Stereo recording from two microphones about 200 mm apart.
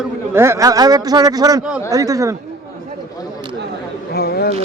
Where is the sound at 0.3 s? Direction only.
15° right (ahead or behind).